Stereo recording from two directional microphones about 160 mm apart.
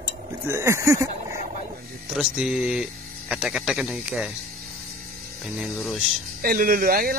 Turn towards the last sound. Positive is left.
turn(degrees=-65)  # may be behind; listen again after turning